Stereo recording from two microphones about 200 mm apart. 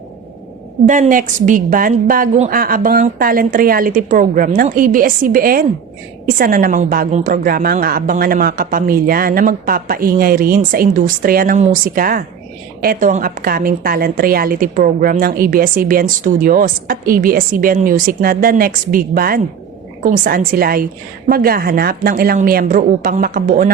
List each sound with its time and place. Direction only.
0.9 s a woman's voice: 40° right (ahead or behind)